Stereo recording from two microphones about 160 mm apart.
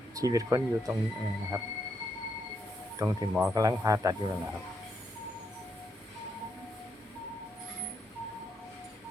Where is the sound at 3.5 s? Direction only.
20° right (ahead or behind).